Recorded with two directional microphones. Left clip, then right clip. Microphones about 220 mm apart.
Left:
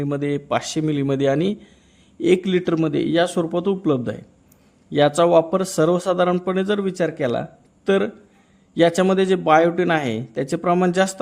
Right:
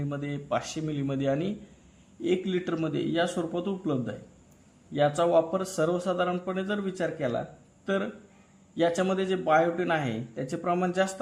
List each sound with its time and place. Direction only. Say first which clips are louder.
0.0 s a man's voice: left 12 dB; 35° left (ahead or behind)